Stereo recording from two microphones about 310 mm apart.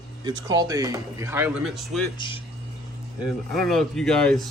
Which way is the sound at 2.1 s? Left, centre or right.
Centre.